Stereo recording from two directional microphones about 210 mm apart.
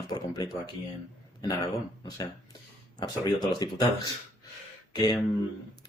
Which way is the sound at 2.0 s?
20° left (ahead or behind).